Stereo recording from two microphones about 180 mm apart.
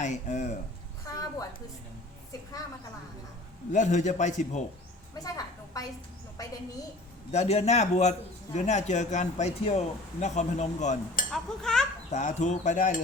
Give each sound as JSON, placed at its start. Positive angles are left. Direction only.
{"t": 0.0, "sound": "speech", "side_deg": 40}
{"t": 3.7, "sound": "speech", "side_deg": 45}
{"t": 5.2, "sound": "a woman's voice", "side_deg": 20}
{"t": 7.3, "sound": "speech", "side_deg": 35}
{"t": 11.3, "sound": "speech", "side_deg": 5}
{"t": 12.1, "sound": "speech", "side_deg": 40}